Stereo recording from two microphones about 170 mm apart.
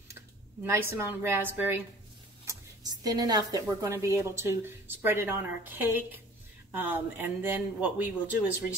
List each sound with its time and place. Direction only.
0.7 s speech: 15° right (ahead or behind)